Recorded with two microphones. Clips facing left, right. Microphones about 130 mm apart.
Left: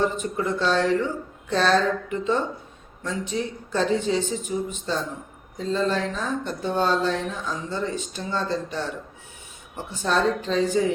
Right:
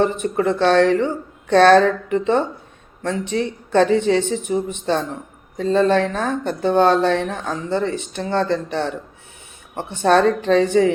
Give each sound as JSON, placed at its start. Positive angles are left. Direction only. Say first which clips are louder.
{"t": 0.0, "sound": "speech", "louder": "right 6 dB", "side_deg": -65}